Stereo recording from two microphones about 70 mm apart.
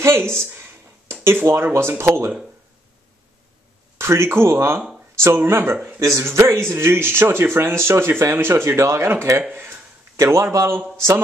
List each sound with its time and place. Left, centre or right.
0.0 s a sound: right
1.2 s speech: right
4.0 s speech: right
5.9 s speech: right
10.1 s speech: right